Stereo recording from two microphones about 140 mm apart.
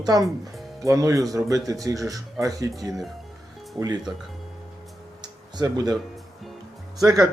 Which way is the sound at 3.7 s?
25° right (ahead or behind).